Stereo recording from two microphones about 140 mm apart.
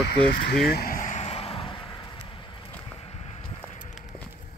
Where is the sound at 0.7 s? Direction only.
90° left; by 2.3 s 35° left (ahead or behind).